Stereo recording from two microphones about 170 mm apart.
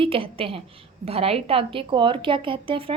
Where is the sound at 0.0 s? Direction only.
30° right (ahead or behind).